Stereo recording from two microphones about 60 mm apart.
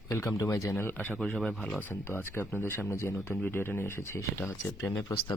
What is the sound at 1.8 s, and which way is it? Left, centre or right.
Speech, left.